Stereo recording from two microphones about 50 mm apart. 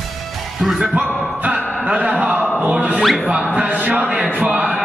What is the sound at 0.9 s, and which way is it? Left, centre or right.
Music, right.